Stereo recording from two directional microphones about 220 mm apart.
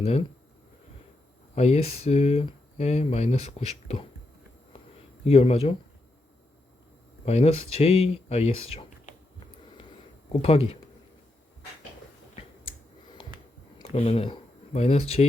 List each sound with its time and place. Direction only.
0.0 s speech: 30° left (ahead or behind)
1.5 s speech: 30° left (ahead or behind)
5.2 s speech: 25° left (ahead or behind)
7.3 s speech: 30° left (ahead or behind)
10.4 s speech: 25° left (ahead or behind)
13.7 s speech: 25° left (ahead or behind)